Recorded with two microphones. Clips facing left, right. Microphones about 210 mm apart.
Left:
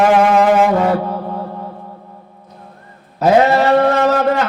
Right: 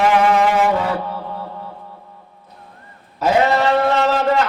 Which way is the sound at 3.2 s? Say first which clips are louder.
Left 4 dB; 40° left (ahead or behind).